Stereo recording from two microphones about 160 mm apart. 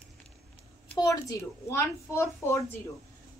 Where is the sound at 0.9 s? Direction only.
20° left (ahead or behind).